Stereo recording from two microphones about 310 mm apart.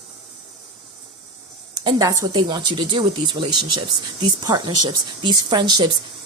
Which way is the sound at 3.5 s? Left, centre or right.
Right.